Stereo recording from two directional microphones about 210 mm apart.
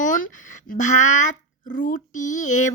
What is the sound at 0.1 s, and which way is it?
Speech, 35° left (ahead or behind).